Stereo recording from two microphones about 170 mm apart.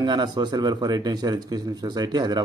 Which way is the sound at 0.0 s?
25° right (ahead or behind).